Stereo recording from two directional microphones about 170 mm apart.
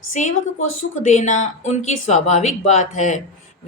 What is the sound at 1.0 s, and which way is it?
A woman's voice, 45° left (ahead or behind).